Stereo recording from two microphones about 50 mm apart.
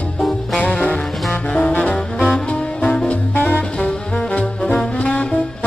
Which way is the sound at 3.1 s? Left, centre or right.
Left.